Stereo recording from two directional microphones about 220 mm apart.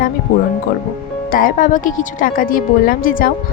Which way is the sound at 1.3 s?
40° left (ahead or behind).